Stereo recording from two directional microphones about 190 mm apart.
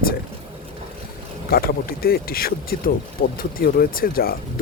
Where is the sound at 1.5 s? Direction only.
50° left (ahead or behind).